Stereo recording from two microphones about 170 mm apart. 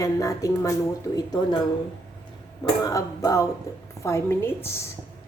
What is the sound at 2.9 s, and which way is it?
A woman's voice, 20° left (ahead or behind).